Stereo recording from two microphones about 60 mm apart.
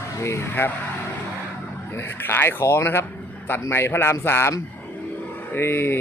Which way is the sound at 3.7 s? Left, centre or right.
Left.